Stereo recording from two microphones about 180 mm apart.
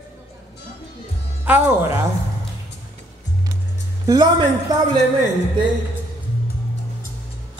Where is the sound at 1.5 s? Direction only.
10° right (ahead or behind).